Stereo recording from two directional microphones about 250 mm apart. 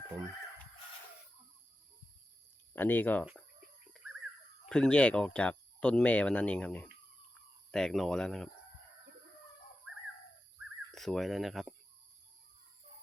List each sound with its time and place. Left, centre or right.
2.7 s speech: centre
4.7 s speech: centre
10.9 s speech: centre